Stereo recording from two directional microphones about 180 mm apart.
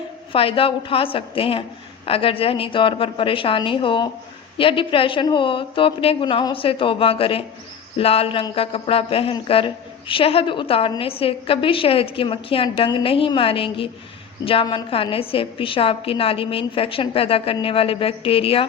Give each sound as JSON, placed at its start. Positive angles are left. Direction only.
{"t": 0.3, "sound": "a woman's voice", "side_deg": 30}